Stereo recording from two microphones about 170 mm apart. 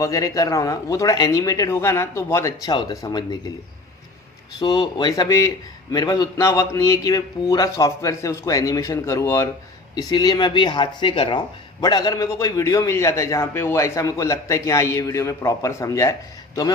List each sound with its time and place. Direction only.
0.0 s speech: 20° left (ahead or behind)
4.6 s speech: 25° left (ahead or behind)